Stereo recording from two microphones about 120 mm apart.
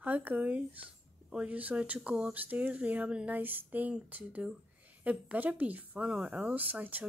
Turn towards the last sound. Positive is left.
turn(degrees=-15)  # may be behind; listen again after turning